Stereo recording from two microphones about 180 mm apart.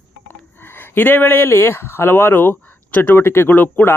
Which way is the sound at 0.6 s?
10° left (ahead or behind).